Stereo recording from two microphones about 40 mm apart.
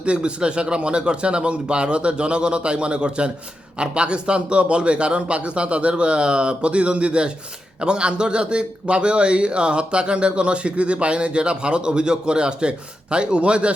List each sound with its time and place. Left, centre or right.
0.0 s a man's voice: right